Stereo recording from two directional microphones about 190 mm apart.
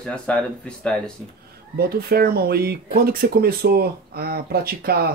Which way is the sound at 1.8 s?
55° right (ahead or behind).